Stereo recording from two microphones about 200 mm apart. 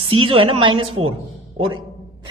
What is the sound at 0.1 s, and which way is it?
A man's voice, 25° right (ahead or behind).